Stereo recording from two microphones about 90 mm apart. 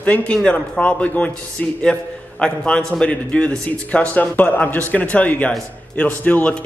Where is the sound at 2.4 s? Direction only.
10° left (ahead or behind).